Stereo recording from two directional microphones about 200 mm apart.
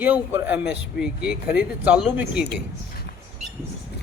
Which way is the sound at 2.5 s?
55° left (ahead or behind).